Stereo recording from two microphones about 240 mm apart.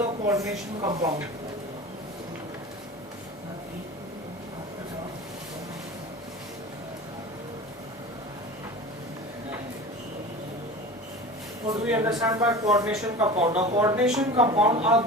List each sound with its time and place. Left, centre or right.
0.0 s a sound: centre
0.8 s speech: centre
11.7 s speech: centre
12.9 s speech: centre
13.3 s a woman's voice: right
13.7 s speech: centre
14.2 s a woman's voice: right